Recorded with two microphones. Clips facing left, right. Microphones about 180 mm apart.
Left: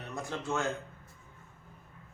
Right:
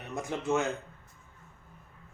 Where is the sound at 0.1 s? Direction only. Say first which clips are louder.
Right 5 dB; 20° right (ahead or behind).